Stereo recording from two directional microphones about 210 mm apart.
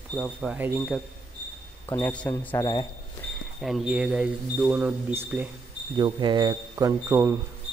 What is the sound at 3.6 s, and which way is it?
Speech, centre (ahead or behind).